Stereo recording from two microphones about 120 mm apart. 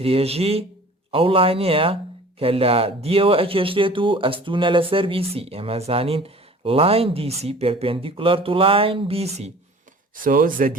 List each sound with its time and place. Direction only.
0.0 s speech: 55° right (ahead or behind)